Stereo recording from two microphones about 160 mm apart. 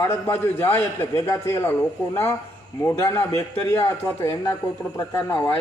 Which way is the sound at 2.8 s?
15° left (ahead or behind).